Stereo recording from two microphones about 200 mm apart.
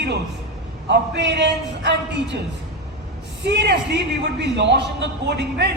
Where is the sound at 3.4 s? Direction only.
60° right (ahead or behind).